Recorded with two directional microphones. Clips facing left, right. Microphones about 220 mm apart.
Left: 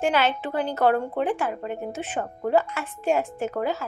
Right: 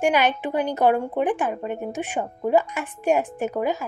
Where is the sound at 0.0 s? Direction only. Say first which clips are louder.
Right 2 dB; 15° right (ahead or behind).